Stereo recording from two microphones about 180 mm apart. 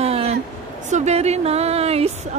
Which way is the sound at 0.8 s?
40° right (ahead or behind).